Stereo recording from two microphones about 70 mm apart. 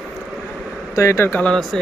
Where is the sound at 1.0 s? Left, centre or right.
Left.